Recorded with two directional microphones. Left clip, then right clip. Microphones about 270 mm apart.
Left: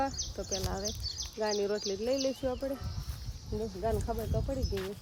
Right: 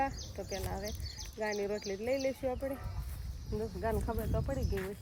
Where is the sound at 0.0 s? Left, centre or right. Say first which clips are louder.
Left 2 dB; centre.